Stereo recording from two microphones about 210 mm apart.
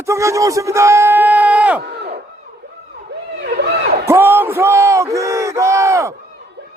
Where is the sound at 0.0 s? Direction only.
15° right (ahead or behind).